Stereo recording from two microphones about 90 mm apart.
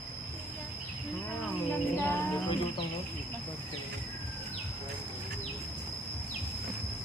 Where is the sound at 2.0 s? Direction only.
25° left (ahead or behind).